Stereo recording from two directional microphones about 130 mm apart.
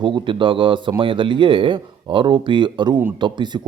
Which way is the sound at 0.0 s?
40° right (ahead or behind).